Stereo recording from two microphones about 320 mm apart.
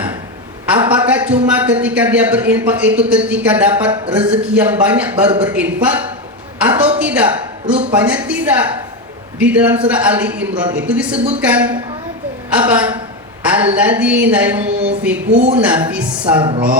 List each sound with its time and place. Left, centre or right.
0.7 s a man's voice: centre
6.6 s a sound: centre
7.0 s a woman's voice: centre
16.4 s speech: centre